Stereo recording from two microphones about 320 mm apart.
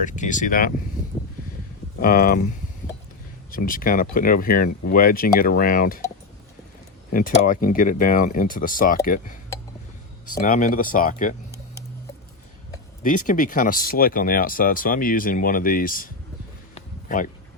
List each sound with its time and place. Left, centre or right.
0.0 s speech: left
2.0 s speech: left
3.5 s speech: left
7.1 s speech: left
13.0 s speech: left
16.7 s a sound: left